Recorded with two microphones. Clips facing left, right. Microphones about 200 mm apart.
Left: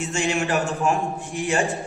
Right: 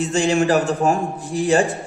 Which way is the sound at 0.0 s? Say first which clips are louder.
Right 6 dB; 35° right (ahead or behind).